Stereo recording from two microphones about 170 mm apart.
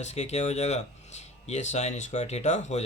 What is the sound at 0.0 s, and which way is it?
Speech, 40° left (ahead or behind).